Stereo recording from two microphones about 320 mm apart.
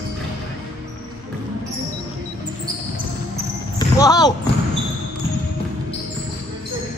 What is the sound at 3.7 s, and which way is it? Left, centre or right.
Basketball bounce, centre.